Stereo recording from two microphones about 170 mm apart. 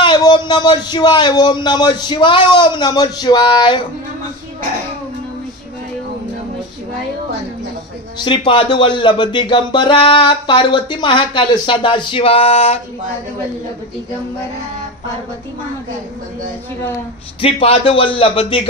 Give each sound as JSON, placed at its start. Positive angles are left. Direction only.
{"t": 0.0, "sound": "speech", "side_deg": 25}
{"t": 8.2, "sound": "speech", "side_deg": 25}
{"t": 17.4, "sound": "speech", "side_deg": 35}